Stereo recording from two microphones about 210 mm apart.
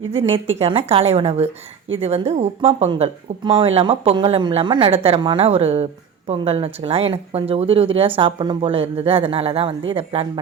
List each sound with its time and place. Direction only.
0.1 s speech: 25° right (ahead or behind)